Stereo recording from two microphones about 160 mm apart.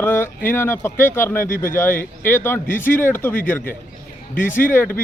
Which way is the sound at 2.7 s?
55° left (ahead or behind).